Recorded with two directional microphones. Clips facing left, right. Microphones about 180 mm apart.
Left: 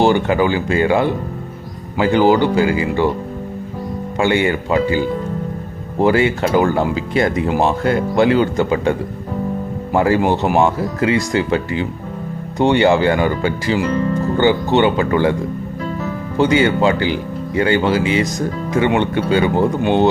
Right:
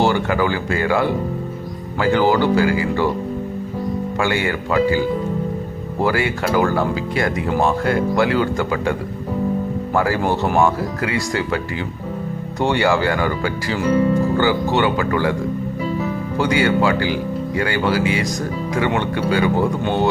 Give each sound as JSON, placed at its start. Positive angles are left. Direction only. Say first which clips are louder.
{"t": 0.0, "sound": "speech", "louder": "left 3 dB", "side_deg": 20}
{"t": 4.2, "sound": "speech", "louder": "left 6 dB", "side_deg": 20}
{"t": 16.4, "sound": "speech", "louder": "left 3 dB", "side_deg": 20}